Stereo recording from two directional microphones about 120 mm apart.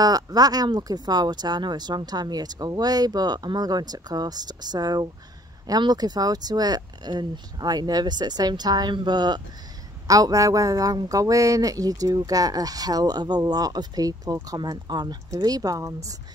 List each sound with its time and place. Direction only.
0.0 s speech: 30° right (ahead or behind)